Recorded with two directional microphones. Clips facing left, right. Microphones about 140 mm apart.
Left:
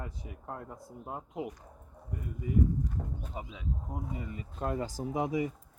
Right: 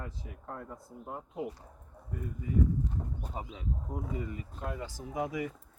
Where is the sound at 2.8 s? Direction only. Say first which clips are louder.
Even; 35° right (ahead or behind).